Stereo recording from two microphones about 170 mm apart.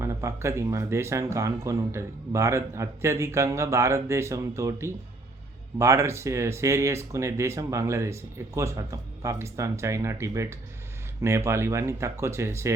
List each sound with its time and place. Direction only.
0.0 s speech: 15° right (ahead or behind)